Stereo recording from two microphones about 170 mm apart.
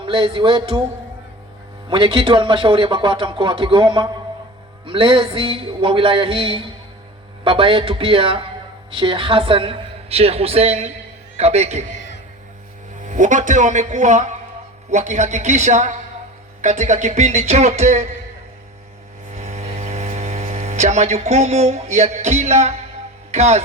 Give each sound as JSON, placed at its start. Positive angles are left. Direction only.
{"t": 0.0, "sound": "a man's voice", "side_deg": -30}
{"t": 1.9, "sound": "a man's voice", "side_deg": -30}
{"t": 13.1, "sound": "music", "side_deg": -50}
{"t": 19.4, "sound": "mains hum", "side_deg": -40}
{"t": 23.3, "sound": "a man's voice", "side_deg": -40}